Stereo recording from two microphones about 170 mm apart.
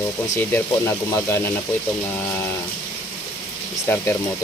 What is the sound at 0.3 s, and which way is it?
Speech, 15° left (ahead or behind).